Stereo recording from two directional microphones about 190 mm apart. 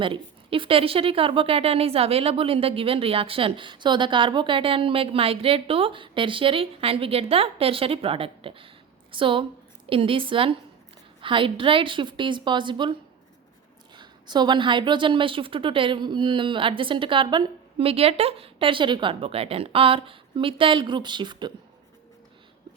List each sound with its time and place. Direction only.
0.0 s a woman's voice: 25° right (ahead or behind)